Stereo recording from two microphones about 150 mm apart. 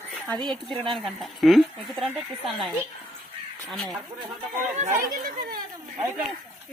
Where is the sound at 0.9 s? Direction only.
Centre (ahead or behind).